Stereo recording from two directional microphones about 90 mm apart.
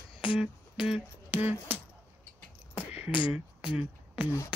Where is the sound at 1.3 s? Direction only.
20° right (ahead or behind).